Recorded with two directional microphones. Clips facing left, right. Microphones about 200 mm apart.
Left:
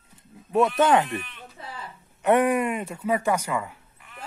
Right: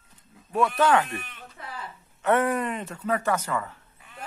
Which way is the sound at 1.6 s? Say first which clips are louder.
Left 1 dB; 25° left (ahead or behind).